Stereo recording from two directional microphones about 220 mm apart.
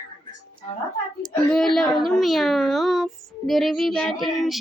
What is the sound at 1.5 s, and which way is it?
Speech, 5° left (ahead or behind).